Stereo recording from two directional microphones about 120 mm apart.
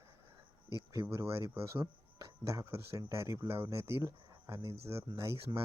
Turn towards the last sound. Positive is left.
turn(degrees=-25)  # may be behind; listen again after turning